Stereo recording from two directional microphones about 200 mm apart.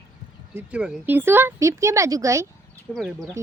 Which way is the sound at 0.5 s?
5° right (ahead or behind).